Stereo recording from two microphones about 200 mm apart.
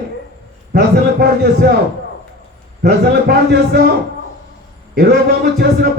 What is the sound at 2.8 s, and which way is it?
A man's voice, 50° right (ahead or behind).